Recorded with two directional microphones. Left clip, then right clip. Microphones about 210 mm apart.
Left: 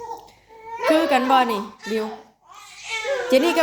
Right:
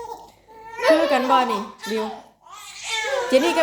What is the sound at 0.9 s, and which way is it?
A child's voice, 20° left (ahead or behind).